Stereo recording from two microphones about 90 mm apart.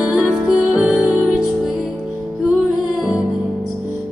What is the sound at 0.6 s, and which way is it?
Music, 15° right (ahead or behind).